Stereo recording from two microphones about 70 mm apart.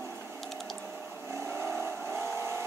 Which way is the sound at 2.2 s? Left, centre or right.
Right.